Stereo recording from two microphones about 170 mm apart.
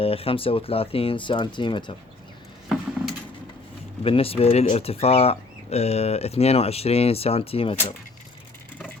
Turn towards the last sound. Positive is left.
turn(degrees=35)  # may be behind; listen again after turning